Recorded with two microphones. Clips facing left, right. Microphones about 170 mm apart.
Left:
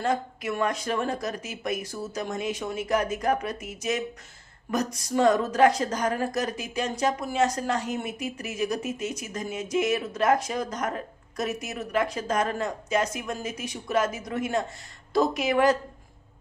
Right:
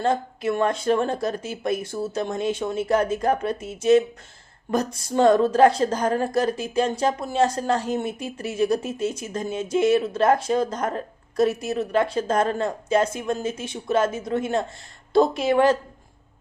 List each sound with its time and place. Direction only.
0.0 s speech: 30° right (ahead or behind)